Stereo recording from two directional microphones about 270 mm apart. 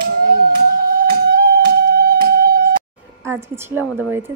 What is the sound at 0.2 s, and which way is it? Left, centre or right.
Music, right.